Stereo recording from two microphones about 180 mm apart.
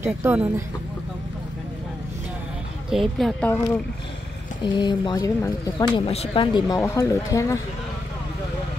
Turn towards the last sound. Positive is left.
turn(degrees=15)  # may be behind; listen again after turning